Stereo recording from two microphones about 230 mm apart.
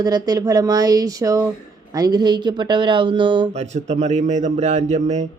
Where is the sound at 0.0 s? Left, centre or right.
Centre.